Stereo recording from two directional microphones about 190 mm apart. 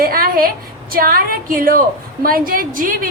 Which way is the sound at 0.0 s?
50° right (ahead or behind).